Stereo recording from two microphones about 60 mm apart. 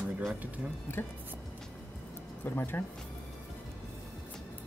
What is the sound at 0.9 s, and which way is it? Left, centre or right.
Speech, left.